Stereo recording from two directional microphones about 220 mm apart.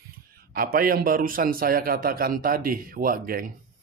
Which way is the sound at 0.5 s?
40° right (ahead or behind).